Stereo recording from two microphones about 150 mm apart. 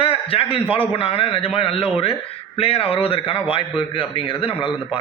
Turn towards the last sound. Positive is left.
turn(degrees=35)  # may be behind; listen again after turning